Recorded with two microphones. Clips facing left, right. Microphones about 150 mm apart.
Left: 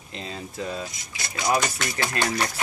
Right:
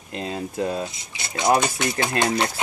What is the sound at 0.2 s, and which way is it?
Speech, 50° right (ahead or behind).